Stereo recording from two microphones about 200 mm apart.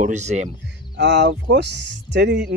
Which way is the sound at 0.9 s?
60° right (ahead or behind).